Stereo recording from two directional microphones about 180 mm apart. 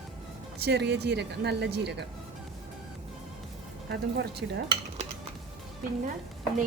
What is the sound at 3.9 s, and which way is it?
Speech, 65° right (ahead or behind).